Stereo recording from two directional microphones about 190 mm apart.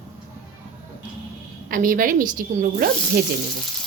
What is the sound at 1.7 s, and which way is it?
A woman's voice, 45° right (ahead or behind).